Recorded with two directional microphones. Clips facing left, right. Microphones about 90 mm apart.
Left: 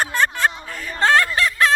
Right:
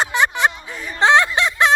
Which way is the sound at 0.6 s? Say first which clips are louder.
Right 4 dB; 15° right (ahead or behind).